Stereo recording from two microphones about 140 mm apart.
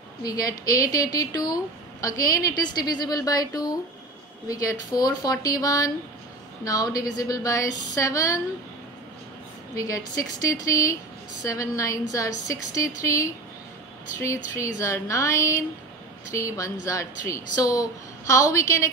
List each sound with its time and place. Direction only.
0.2 s speech: 25° left (ahead or behind)
10.4 s speech: 25° left (ahead or behind)